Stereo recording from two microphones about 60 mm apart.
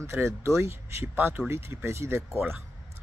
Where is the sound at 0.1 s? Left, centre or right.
Right.